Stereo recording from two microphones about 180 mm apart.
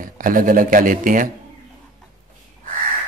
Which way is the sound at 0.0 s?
50° right (ahead or behind).